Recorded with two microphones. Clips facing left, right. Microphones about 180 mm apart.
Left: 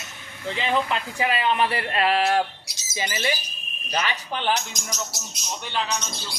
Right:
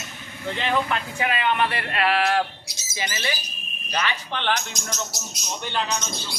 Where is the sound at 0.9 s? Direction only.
25° left (ahead or behind).